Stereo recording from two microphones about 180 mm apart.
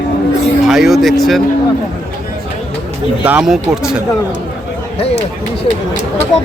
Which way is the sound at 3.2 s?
10° right (ahead or behind).